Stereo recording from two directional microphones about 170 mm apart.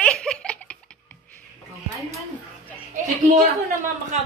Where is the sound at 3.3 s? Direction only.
50° right (ahead or behind).